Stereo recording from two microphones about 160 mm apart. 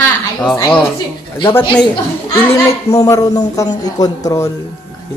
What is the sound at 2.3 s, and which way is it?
A woman's voice, 20° left (ahead or behind).